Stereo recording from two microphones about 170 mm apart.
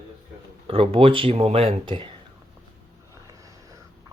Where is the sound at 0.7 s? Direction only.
35° right (ahead or behind).